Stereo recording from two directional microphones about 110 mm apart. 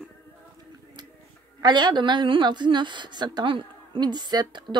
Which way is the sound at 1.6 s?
40° right (ahead or behind).